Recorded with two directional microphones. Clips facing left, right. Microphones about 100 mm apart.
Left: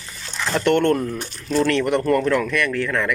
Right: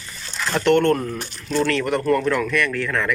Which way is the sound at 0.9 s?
10° left (ahead or behind).